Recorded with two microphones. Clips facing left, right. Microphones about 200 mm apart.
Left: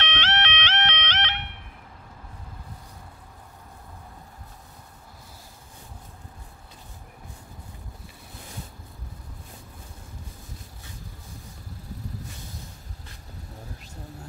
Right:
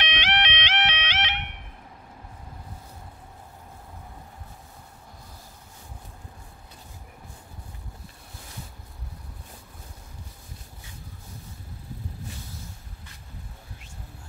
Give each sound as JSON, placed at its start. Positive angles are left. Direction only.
{"t": 0.0, "sound": "music", "side_deg": -15}